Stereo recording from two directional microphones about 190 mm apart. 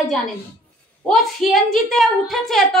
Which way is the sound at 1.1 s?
Centre (ahead or behind).